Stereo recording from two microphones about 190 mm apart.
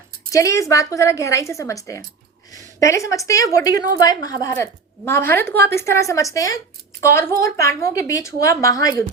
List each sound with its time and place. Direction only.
0.3 s a woman's voice: 15° left (ahead or behind)